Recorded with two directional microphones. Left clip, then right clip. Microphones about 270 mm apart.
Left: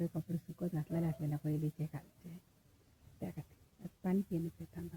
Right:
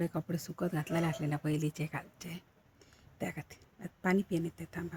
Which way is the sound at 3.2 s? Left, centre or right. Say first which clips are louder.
Right 8 dB; centre.